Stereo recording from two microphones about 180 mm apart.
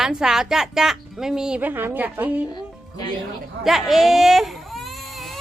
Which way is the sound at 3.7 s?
Centre (ahead or behind).